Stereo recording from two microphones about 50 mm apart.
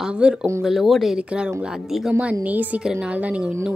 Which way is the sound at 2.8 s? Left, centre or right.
Centre.